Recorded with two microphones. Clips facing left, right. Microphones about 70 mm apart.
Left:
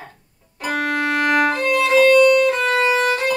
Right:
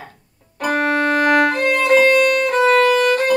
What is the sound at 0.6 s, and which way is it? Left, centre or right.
Violin, right.